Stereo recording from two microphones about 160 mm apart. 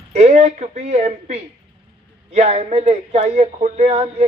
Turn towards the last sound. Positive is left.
turn(degrees=-45)  # may be behind; listen again after turning